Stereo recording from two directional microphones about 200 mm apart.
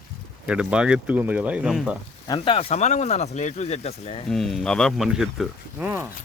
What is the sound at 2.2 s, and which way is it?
Speech, 20° left (ahead or behind).